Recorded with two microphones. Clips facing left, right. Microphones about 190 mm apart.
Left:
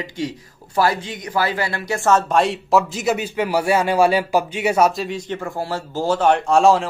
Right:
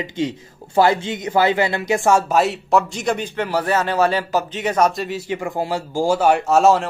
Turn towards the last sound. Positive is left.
turn(degrees=0)  # may be behind; listen again after turning